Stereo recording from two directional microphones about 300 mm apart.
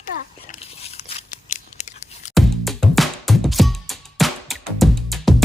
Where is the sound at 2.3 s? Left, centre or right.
Centre.